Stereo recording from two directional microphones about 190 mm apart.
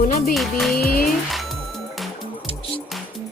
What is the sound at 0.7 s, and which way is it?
Speech, 50° left (ahead or behind).